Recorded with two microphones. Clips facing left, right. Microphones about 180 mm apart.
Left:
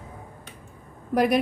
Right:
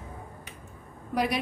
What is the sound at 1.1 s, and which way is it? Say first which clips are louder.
Speech: left 7 dB; 50° left (ahead or behind).